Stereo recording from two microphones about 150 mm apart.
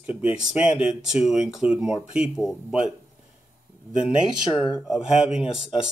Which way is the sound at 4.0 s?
5° right (ahead or behind).